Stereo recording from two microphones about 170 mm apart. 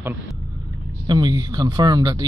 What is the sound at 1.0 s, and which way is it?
A man's voice, 25° right (ahead or behind).